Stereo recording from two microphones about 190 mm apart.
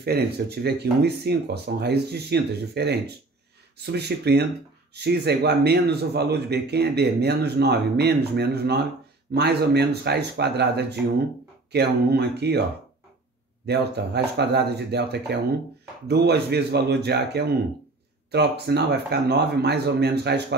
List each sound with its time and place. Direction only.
0.0 s speech: 55° right (ahead or behind)
13.7 s speech: 60° right (ahead or behind)